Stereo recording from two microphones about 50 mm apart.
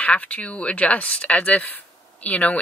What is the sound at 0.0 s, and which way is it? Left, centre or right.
Speech, left.